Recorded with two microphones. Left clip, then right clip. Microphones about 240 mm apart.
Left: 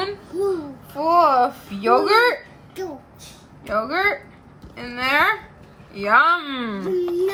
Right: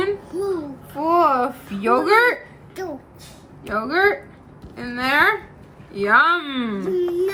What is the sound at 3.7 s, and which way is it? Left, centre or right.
A woman's voice, left.